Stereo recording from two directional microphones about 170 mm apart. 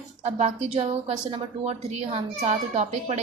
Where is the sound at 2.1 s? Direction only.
40° right (ahead or behind).